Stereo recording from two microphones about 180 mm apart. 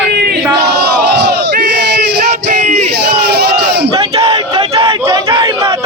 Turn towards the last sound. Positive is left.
turn(degrees=-25)  # may be behind; listen again after turning